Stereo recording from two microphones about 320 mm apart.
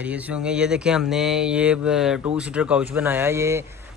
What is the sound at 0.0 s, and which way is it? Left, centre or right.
Speech, centre.